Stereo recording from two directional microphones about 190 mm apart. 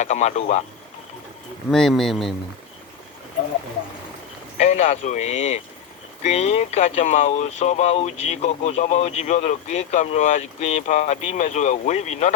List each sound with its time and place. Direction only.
0.0 s speech: 40° left (ahead or behind)
1.7 s speech: centre (ahead or behind)
4.5 s speech: 40° left (ahead or behind)